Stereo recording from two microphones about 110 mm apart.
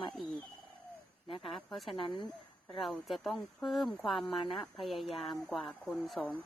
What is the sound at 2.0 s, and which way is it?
Speech, 45° left (ahead or behind).